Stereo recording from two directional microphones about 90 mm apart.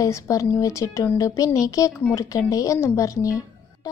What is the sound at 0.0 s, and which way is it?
A woman's voice, 35° left (ahead or behind).